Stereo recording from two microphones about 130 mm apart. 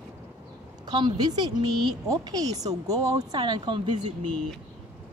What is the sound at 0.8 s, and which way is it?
A woman's voice, 35° right (ahead or behind).